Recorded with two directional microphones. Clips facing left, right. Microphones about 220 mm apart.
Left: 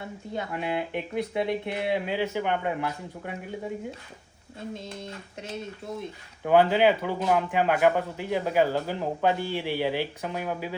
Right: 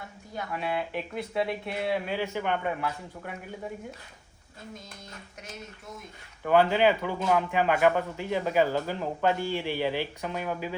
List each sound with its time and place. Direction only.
0.0 s speech: 20° left (ahead or behind)
4.7 s speech: 25° left (ahead or behind)
6.4 s a man's voice: 15° left (ahead or behind)